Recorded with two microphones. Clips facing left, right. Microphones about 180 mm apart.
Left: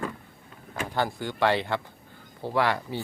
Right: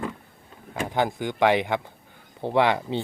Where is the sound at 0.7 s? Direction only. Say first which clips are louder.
Right 3 dB; 20° right (ahead or behind).